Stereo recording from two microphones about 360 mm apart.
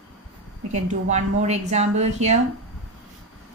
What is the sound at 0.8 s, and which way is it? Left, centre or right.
A woman's voice, centre.